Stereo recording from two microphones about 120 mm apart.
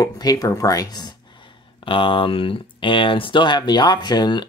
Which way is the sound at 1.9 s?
45° left (ahead or behind).